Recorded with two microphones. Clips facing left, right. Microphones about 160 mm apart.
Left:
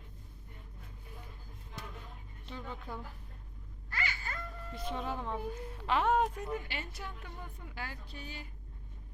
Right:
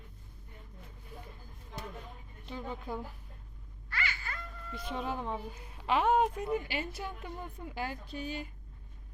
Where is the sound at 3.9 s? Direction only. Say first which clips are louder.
Right 1 dB; 40° left (ahead or behind).